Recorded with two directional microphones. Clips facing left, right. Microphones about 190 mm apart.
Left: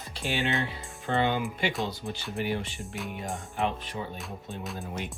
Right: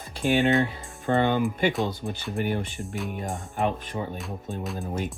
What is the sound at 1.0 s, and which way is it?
Speech, 50° right (ahead or behind).